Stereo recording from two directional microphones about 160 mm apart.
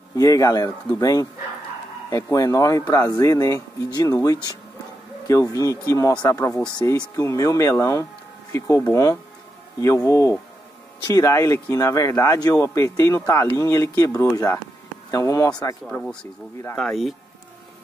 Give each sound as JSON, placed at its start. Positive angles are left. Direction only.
{"t": 0.1, "sound": "speech", "side_deg": 20}
{"t": 15.9, "sound": "speech", "side_deg": 5}